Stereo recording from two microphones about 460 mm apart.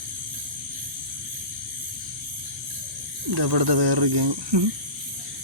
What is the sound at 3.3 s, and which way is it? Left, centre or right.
Speech, right.